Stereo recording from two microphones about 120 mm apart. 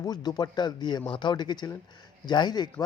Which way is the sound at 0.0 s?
35° left (ahead or behind).